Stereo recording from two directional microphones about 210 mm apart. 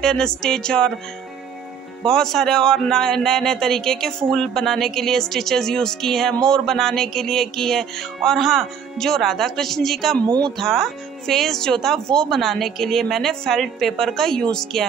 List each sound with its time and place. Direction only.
0.0 s a man's voice: 5° left (ahead or behind)
2.0 s a man's voice: centre (ahead or behind)
10.2 s speech: 20° right (ahead or behind)
10.6 s a man's voice: centre (ahead or behind)